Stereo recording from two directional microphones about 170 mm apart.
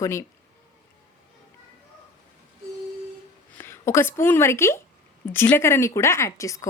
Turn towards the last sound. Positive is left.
turn(degrees=20)  # may be behind; listen again after turning